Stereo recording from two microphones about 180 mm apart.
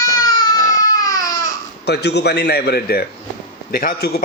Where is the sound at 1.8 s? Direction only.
65° left (ahead or behind).